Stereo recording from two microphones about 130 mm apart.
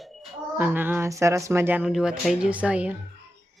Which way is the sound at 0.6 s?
15° right (ahead or behind).